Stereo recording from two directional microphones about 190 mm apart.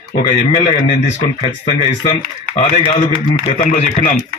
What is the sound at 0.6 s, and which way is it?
Speech, 35° left (ahead or behind).